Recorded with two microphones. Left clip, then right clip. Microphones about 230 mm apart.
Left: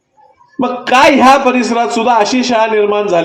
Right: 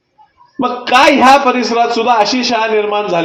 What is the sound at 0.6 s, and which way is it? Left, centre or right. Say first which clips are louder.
A man's voice: left 1 dB; left.